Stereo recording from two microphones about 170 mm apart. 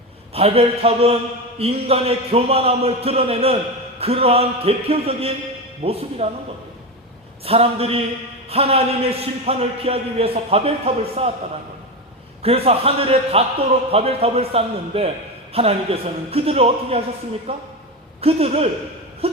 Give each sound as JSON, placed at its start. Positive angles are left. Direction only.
{"t": 0.3, "sound": "a man's voice", "side_deg": -35}
{"t": 7.4, "sound": "a man's voice", "side_deg": -35}
{"t": 12.4, "sound": "a man's voice", "side_deg": -35}
{"t": 19.2, "sound": "a sound", "side_deg": -35}